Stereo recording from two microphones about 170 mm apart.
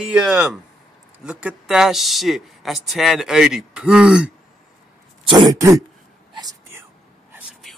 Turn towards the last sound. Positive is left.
turn(degrees=-20)  # may be behind; listen again after turning